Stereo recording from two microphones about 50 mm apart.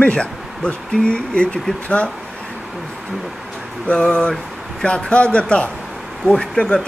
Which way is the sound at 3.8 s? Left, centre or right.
Centre.